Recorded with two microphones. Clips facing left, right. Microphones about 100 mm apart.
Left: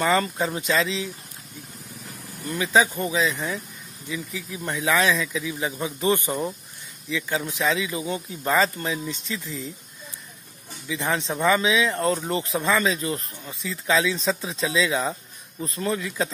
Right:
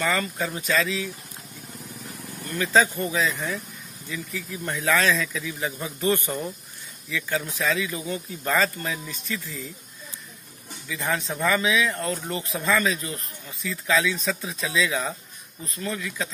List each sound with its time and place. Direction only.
0.0 s speech: 30° left (ahead or behind)
2.4 s a man's voice: 15° left (ahead or behind)
10.9 s speech: 25° left (ahead or behind)